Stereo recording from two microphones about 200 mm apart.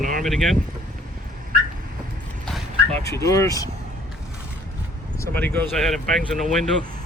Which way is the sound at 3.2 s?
15° left (ahead or behind).